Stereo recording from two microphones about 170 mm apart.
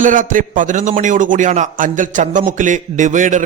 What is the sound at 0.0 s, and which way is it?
A man's voice, 50° right (ahead or behind).